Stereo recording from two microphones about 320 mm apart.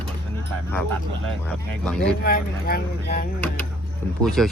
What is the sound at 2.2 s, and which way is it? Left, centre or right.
Speech, left.